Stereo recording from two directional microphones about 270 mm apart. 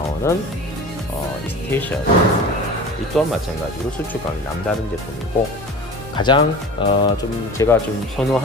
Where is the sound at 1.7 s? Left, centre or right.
Centre.